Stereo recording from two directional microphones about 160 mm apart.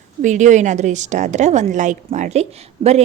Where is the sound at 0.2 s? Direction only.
50° right (ahead or behind).